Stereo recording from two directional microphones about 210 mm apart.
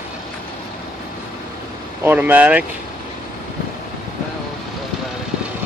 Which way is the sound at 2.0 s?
10° right (ahead or behind).